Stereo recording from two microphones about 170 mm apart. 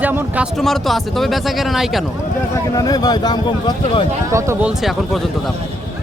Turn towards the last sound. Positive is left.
turn(degrees=0)  # may be behind; listen again after turning